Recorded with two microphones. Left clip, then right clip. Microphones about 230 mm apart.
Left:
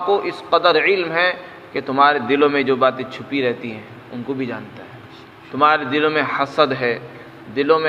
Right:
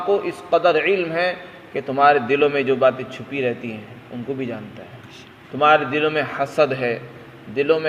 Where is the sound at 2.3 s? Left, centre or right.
Centre.